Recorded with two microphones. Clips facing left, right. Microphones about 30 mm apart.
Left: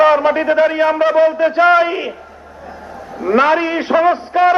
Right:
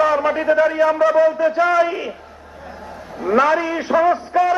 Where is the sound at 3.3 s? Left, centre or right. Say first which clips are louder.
Left 3 dB; left.